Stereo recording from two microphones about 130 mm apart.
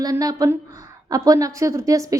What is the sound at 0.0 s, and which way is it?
A woman's voice, 30° right (ahead or behind).